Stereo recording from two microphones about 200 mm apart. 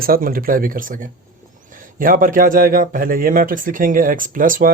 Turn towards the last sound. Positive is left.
turn(degrees=-45)  # may be behind; listen again after turning